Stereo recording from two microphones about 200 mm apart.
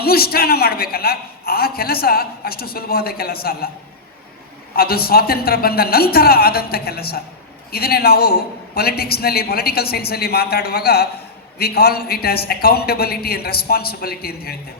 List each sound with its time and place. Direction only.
0.0 s a man's voice: 50° left (ahead or behind)
4.7 s a man's voice: 50° left (ahead or behind)